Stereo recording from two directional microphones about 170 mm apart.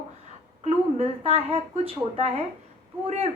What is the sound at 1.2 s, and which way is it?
A woman's voice, 35° right (ahead or behind).